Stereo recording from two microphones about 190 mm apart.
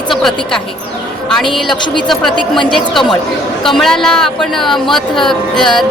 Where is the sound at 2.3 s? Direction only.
25° left (ahead or behind).